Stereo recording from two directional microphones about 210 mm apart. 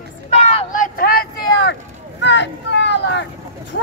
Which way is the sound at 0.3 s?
30° left (ahead or behind).